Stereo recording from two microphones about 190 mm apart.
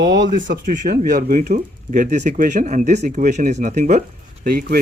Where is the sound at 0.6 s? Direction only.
40° right (ahead or behind).